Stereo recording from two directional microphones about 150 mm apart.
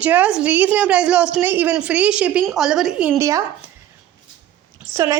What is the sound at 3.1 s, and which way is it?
Speech, 20° right (ahead or behind).